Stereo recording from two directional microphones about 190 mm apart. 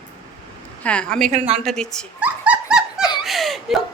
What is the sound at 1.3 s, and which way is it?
Speech, 35° right (ahead or behind).